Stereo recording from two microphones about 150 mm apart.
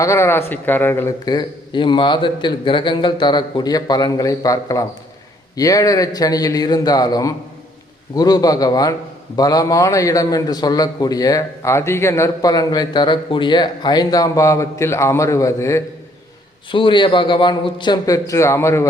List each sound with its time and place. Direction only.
0.0 s a man's voice: 20° left (ahead or behind)
1.2 s a man's voice: 30° left (ahead or behind)
16.7 s a man's voice: 35° left (ahead or behind)